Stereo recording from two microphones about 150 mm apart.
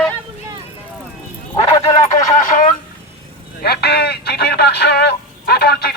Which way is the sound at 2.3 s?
60° left (ahead or behind).